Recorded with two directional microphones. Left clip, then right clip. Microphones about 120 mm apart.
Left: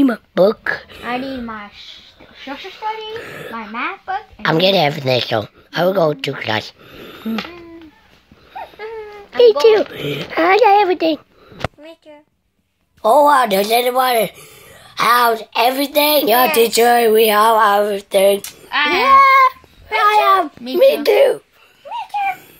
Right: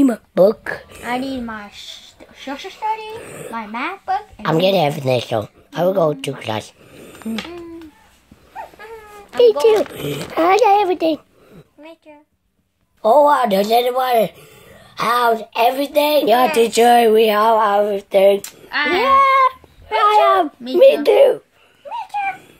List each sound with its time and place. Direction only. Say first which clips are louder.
0.0 s speech: even; 10° right (ahead or behind)
2.5 s speech: right 1 dB; 25° left (ahead or behind)
3.2 s speech: left 3 dB; 5° right (ahead or behind)
3.7 s speech: left 3 dB; 35° left (ahead or behind)
4.4 s a woman's voice: left 3 dB; 5° right (ahead or behind)
8.5 s baby cry: left 4 dB; 70° left (ahead or behind)
9.4 s a woman's voice: left 2 dB; centre (ahead or behind)
13.0 s a woman's voice: left 1 dB; 15° left (ahead or behind)
16.3 s a woman's voice: left 1 dB; centre (ahead or behind)
18.7 s a child's voice: left 2 dB; 45° left (ahead or behind)
18.9 s a child's voice: left 3 dB; 20° right (ahead or behind)
21.9 s a sound: left 2 dB; 30° left (ahead or behind)